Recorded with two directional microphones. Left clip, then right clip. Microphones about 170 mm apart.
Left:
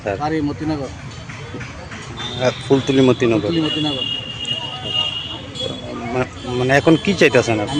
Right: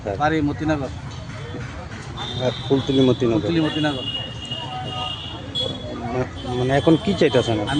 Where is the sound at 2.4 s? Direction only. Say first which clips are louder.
Left 5 dB; 5° left (ahead or behind).